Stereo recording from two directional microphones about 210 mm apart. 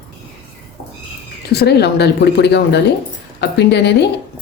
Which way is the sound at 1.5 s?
50° left (ahead or behind).